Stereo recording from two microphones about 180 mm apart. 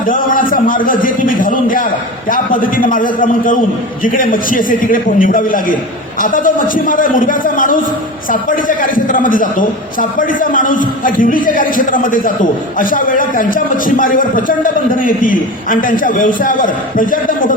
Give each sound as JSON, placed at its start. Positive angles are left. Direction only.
{"t": 0.0, "sound": "a man's voice", "side_deg": 50}